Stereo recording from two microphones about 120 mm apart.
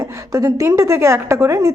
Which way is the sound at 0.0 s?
25° right (ahead or behind).